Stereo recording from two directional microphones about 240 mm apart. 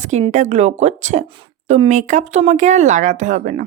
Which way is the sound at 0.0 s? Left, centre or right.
Right.